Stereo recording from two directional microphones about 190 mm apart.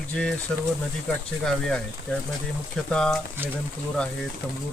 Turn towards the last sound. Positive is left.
turn(degrees=5)  # may be behind; listen again after turning